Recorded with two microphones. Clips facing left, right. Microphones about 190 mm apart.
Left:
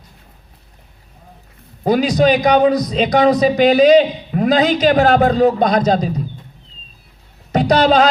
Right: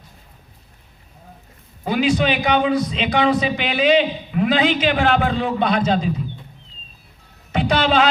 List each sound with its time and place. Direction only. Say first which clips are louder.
1.8 s a man's voice: left 5 dB; 40° left (ahead or behind)
7.5 s music: left 5 dB; 40° left (ahead or behind)